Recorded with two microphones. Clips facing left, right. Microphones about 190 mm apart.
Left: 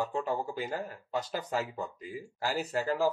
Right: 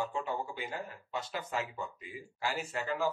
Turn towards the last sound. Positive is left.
turn(degrees=35)  # may be behind; listen again after turning